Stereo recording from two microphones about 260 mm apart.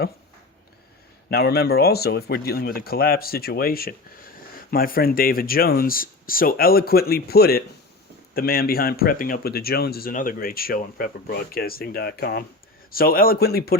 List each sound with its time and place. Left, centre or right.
1.3 s speech: left